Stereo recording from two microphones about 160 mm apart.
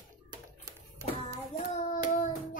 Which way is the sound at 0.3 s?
20° right (ahead or behind).